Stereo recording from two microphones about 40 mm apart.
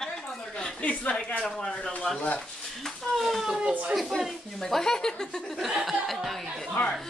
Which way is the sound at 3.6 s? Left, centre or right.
Right.